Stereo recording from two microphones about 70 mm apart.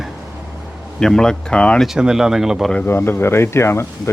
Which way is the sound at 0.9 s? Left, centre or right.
Centre.